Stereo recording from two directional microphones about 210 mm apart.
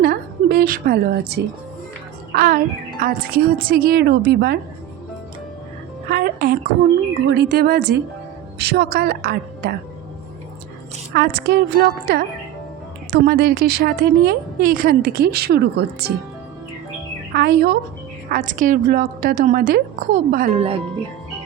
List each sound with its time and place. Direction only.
0.0 s a woman's voice: 45° right (ahead or behind)
6.1 s a woman's voice: 45° right (ahead or behind)
11.1 s a woman's voice: 50° right (ahead or behind)
17.3 s a woman's voice: 50° right (ahead or behind)
18.3 s a woman's voice: 40° right (ahead or behind)
20.5 s speech: 30° right (ahead or behind)